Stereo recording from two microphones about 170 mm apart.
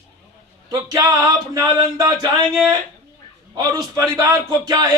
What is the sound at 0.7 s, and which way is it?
Speech, 20° right (ahead or behind).